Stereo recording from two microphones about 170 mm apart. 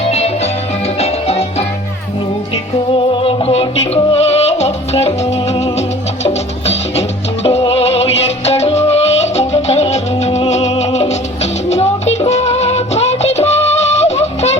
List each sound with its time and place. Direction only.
0.1 s music: 40° left (ahead or behind)
3.2 s music: 30° left (ahead or behind)